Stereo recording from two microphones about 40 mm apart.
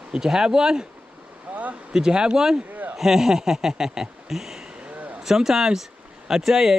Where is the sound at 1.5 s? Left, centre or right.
Right.